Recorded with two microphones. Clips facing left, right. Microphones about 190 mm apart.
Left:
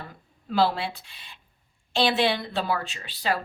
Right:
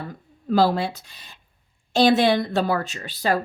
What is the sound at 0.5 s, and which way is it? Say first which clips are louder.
A woman's voice: right 4 dB; 40° right (ahead or behind).